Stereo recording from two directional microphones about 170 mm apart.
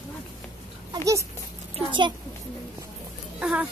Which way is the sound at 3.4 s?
5° right (ahead or behind).